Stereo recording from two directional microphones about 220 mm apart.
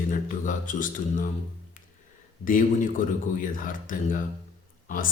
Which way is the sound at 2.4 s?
40° left (ahead or behind).